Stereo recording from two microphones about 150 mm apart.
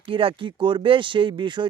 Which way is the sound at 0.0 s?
35° right (ahead or behind).